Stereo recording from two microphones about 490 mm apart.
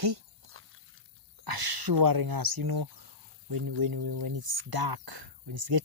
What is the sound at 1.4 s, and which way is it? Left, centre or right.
Speech, right.